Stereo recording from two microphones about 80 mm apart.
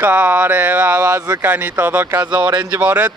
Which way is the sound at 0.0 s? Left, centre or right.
Right.